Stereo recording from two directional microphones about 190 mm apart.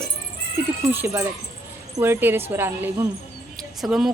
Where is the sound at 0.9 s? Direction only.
10° right (ahead or behind).